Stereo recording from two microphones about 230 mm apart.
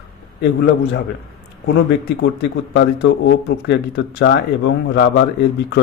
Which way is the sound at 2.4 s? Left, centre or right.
Left.